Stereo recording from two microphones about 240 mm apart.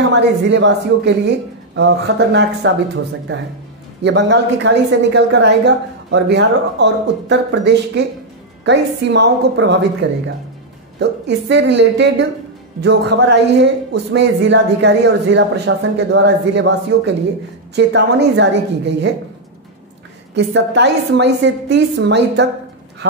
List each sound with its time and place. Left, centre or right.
0.1 s speech: right
20.3 s speech: right